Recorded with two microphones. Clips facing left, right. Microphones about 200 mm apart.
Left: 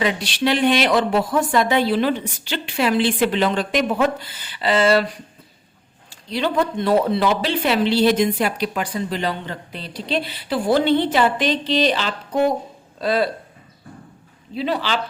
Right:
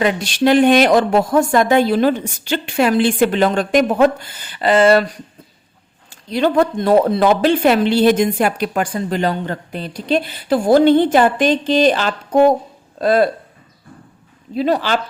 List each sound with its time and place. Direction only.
0.0 s speech: 45° right (ahead or behind)
6.1 s speech: 50° right (ahead or behind)
14.5 s speech: 45° right (ahead or behind)